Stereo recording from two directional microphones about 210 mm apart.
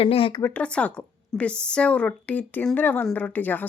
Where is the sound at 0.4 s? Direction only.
5° left (ahead or behind).